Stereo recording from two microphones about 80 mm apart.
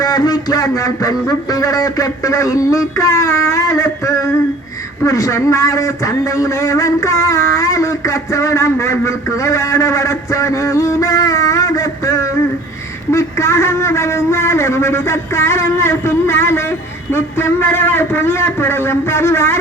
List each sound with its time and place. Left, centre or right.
0.0 s a man's voice: left